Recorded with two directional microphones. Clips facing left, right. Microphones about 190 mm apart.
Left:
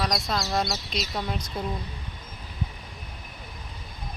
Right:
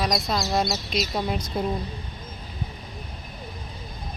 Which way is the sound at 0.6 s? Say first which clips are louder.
Right 4 dB; centre (ahead or behind).